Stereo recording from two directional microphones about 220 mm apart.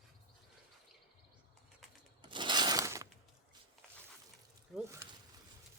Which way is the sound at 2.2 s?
20° right (ahead or behind).